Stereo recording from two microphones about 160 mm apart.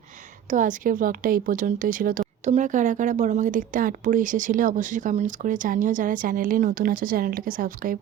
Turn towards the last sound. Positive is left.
turn(degrees=-60)  # may be behind; listen again after turning